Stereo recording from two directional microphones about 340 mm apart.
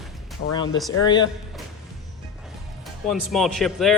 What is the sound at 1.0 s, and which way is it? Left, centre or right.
Speech, centre.